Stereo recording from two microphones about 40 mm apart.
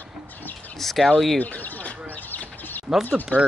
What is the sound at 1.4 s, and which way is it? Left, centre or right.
Bird, left.